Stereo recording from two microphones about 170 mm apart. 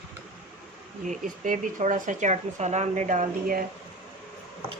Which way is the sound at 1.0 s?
50° right (ahead or behind).